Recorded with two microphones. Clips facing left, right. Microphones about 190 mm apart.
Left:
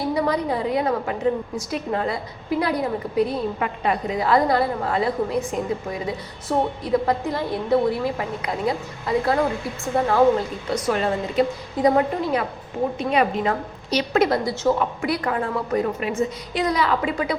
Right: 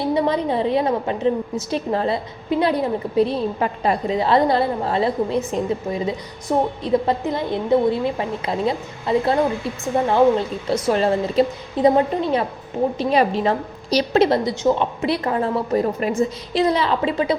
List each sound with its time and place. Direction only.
0.0 s a woman's voice: 25° right (ahead or behind)